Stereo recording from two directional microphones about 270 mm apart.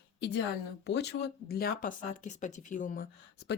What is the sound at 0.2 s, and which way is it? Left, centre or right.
A woman's voice, left.